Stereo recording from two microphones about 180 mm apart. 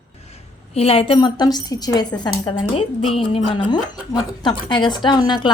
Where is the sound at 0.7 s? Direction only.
30° left (ahead or behind).